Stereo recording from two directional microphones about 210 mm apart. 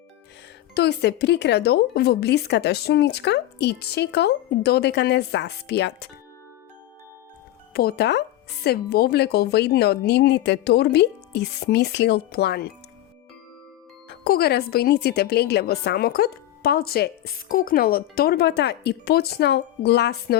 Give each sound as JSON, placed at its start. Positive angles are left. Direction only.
{"t": 0.7, "sound": "speech", "side_deg": 50}
{"t": 7.7, "sound": "speech", "side_deg": 45}
{"t": 14.1, "sound": "speech", "side_deg": 50}